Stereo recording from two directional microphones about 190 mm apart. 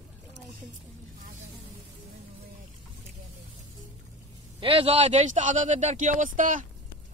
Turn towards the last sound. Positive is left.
turn(degrees=-45)  # may be behind; listen again after turning